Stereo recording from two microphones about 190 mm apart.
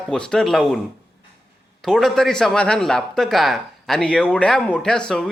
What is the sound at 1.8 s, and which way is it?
Speech, centre (ahead or behind).